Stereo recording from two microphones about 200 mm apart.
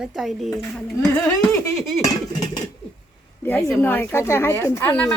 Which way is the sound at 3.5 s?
10° left (ahead or behind).